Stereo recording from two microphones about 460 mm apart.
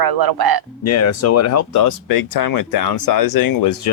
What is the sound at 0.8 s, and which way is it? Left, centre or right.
Speech, left.